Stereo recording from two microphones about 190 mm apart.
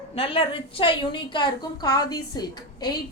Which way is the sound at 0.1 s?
30° left (ahead or behind).